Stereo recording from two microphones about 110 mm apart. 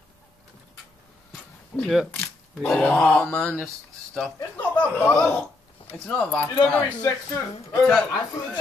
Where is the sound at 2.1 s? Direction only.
20° left (ahead or behind).